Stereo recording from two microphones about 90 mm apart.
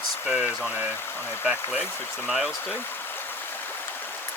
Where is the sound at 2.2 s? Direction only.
5° right (ahead or behind).